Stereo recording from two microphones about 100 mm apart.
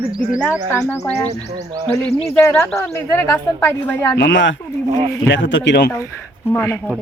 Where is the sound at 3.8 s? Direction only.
15° left (ahead or behind).